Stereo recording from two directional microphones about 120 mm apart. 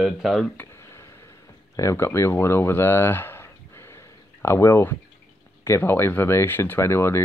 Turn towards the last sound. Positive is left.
turn(degrees=20)  # may be behind; listen again after turning